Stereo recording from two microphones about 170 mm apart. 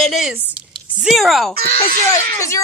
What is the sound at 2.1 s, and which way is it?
Speech, 15° left (ahead or behind).